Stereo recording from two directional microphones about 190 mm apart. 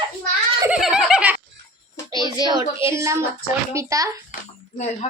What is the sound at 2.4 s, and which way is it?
Child singing, 25° right (ahead or behind).